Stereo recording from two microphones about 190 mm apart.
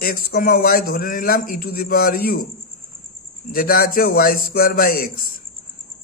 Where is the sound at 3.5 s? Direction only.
50° left (ahead or behind).